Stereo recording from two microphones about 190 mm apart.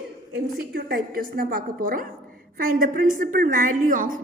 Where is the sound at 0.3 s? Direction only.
55° right (ahead or behind).